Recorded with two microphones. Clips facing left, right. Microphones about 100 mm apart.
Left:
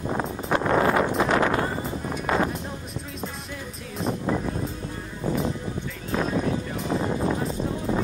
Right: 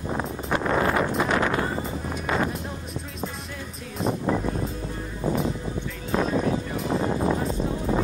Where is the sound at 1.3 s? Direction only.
40° left (ahead or behind).